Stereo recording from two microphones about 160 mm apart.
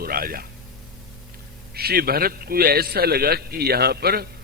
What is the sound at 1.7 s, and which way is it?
A man's voice, 75° right (ahead or behind).